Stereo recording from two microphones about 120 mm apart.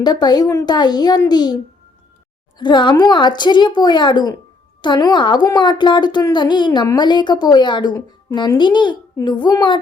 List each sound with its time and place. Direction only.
0.0 s a woman's voice: 35° left (ahead or behind)
2.6 s a woman's voice: 40° left (ahead or behind)